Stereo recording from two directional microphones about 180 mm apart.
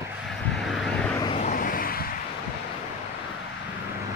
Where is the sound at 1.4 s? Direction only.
50° left (ahead or behind).